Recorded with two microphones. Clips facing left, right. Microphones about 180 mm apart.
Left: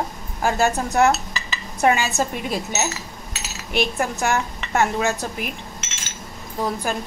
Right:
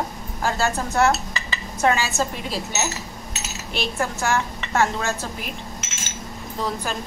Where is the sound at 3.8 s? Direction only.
15° left (ahead or behind).